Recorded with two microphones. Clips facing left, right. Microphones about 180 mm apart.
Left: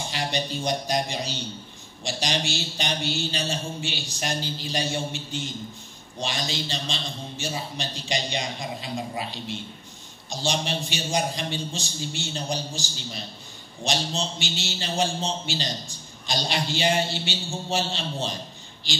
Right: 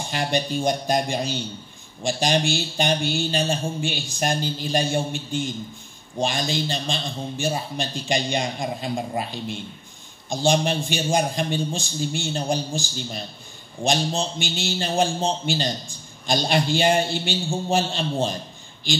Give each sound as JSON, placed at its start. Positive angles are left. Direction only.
{"t": 0.1, "sound": "a man's voice", "side_deg": -50}